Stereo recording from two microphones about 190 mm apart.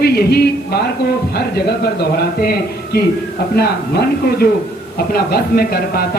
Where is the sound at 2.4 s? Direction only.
50° left (ahead or behind).